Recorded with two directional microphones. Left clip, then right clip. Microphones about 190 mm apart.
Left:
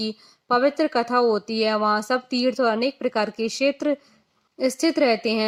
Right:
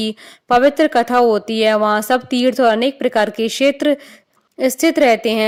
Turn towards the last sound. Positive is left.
turn(degrees=-30)  # may be behind; listen again after turning